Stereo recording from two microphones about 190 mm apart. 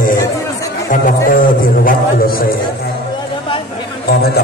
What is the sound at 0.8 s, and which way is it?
Speech, 45° left (ahead or behind).